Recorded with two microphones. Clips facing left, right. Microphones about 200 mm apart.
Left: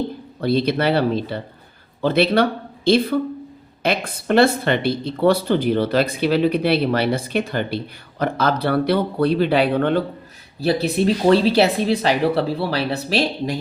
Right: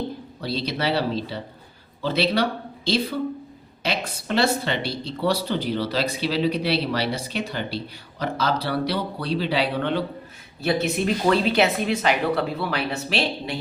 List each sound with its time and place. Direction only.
0.4 s speech: 55° left (ahead or behind)
10.6 s speech: 35° left (ahead or behind)